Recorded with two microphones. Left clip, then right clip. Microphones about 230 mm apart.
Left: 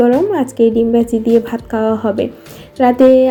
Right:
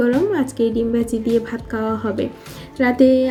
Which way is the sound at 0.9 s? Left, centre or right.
Centre.